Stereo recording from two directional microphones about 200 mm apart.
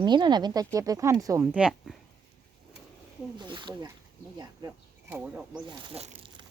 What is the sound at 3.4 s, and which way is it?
Speech, 25° right (ahead or behind).